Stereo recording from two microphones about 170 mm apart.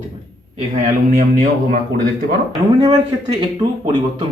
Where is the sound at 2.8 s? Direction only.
25° right (ahead or behind).